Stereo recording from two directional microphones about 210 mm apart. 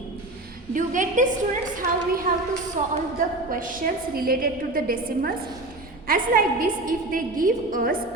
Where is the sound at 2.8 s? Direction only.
35° right (ahead or behind).